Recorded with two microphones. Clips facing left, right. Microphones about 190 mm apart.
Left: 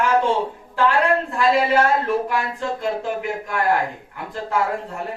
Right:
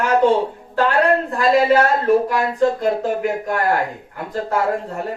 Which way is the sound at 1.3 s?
40° right (ahead or behind).